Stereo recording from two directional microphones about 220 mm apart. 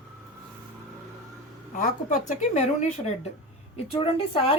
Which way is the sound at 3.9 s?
25° left (ahead or behind).